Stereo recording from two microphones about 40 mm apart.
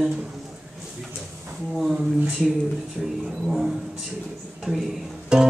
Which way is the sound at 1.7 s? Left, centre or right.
Centre.